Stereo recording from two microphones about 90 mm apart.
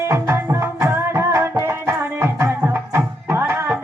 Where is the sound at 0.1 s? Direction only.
30° right (ahead or behind).